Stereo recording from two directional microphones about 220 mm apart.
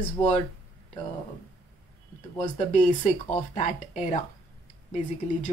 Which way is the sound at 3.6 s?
30° left (ahead or behind).